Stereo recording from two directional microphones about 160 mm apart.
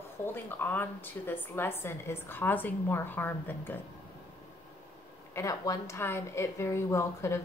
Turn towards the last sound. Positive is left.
turn(degrees=15)  # may be behind; listen again after turning